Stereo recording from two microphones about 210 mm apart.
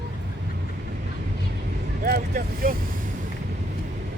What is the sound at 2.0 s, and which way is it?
Vehicle, 45° right (ahead or behind).